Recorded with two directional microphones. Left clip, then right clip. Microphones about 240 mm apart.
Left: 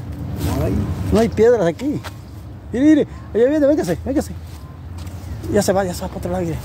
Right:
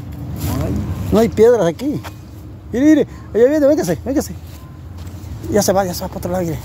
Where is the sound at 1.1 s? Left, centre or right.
Right.